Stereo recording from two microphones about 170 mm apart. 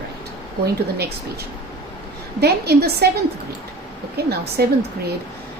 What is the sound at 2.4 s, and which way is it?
Speech, 70° right (ahead or behind).